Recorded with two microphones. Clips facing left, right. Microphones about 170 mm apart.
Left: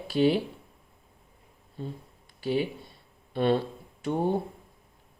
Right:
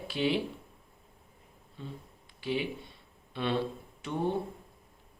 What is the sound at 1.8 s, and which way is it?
Speech, 45° left (ahead or behind).